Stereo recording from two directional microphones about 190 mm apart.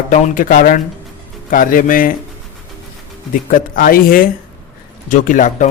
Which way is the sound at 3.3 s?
45° left (ahead or behind).